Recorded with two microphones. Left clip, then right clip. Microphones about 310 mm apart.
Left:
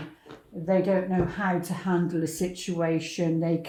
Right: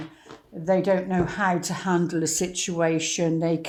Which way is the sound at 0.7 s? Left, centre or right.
Right.